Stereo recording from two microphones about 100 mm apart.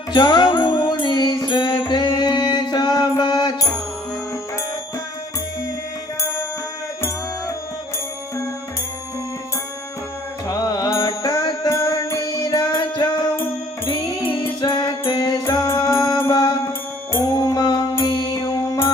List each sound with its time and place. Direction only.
0.1 s music: 45° left (ahead or behind)
10.4 s music: 40° left (ahead or behind)
11.7 s music: 30° left (ahead or behind)
15.0 s music: 35° left (ahead or behind)